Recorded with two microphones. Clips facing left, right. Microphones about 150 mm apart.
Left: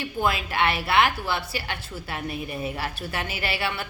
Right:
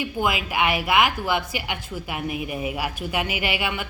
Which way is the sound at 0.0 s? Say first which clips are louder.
Right 1 dB; 15° right (ahead or behind).